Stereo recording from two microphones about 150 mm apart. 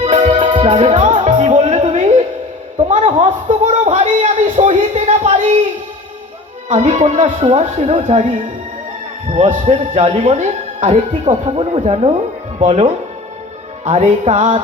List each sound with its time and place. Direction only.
0.0 s music: 45° right (ahead or behind)
2.7 s speech: 45° right (ahead or behind)
6.7 s speech: 50° right (ahead or behind)
9.5 s speech: 50° right (ahead or behind)
11.3 s speech: 40° right (ahead or behind)